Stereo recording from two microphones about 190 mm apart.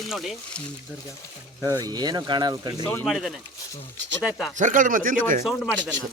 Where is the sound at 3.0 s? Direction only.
Centre (ahead or behind).